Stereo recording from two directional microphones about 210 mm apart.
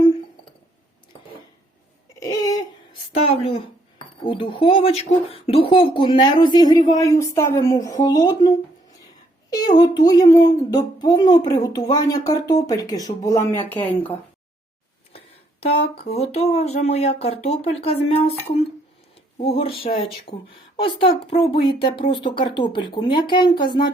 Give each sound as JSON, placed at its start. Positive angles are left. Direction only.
{"t": 2.1, "sound": "a sound", "side_deg": 15}
{"t": 3.2, "sound": "speech", "side_deg": 25}
{"t": 16.0, "sound": "speech", "side_deg": 30}